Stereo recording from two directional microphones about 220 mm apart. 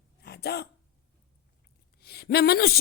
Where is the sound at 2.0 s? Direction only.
45° left (ahead or behind).